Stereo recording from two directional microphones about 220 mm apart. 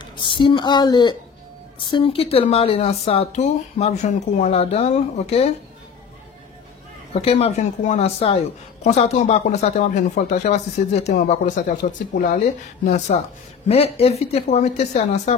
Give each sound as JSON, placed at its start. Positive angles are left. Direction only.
{"t": 0.0, "sound": "speech", "side_deg": 20}
{"t": 7.2, "sound": "a woman's voice", "side_deg": 25}